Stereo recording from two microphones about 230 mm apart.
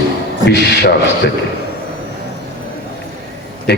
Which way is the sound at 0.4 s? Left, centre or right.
Left.